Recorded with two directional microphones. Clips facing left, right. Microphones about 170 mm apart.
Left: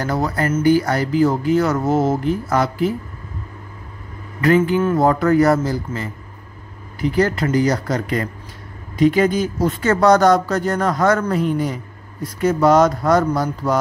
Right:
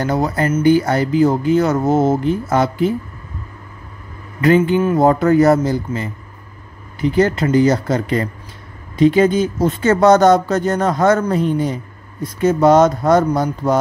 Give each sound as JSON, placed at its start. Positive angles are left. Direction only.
{"t": 0.0, "sound": "speech", "side_deg": -20}
{"t": 4.4, "sound": "speech", "side_deg": -20}